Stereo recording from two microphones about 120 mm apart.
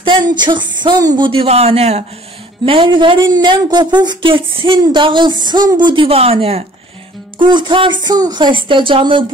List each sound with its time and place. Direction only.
0.0 s speech: 40° right (ahead or behind); by 2.0 s 60° right (ahead or behind)
2.6 s speech: 45° right (ahead or behind)
7.3 s speech: 40° right (ahead or behind)